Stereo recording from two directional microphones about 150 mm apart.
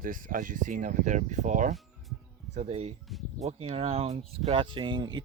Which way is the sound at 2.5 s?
45° right (ahead or behind).